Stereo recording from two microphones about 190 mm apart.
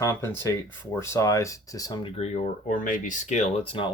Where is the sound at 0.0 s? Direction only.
10° left (ahead or behind).